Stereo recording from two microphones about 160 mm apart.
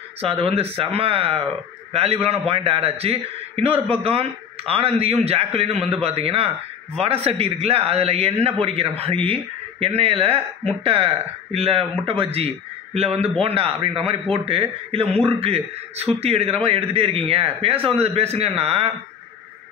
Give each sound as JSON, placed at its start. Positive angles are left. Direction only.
{"t": 0.2, "sound": "a man's voice", "side_deg": -35}